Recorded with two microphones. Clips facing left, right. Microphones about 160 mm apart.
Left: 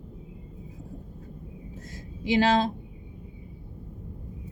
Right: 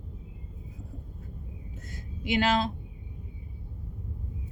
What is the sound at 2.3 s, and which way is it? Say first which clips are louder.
Speech: left 4 dB; 30° left (ahead or behind).